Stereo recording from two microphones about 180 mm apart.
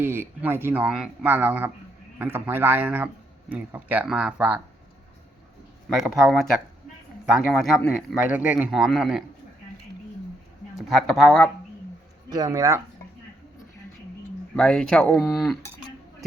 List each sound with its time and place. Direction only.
0.0 s speech: 15° right (ahead or behind)
5.9 s a man's voice: centre (ahead or behind)
8.2 s a man's voice: 10° right (ahead or behind)
10.8 s a man's voice: centre (ahead or behind)
12.3 s speech: 20° right (ahead or behind)
14.5 s a man's voice: 5° left (ahead or behind)